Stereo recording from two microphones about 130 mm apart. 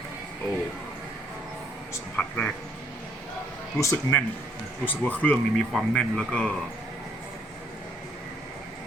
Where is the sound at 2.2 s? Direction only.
10° left (ahead or behind).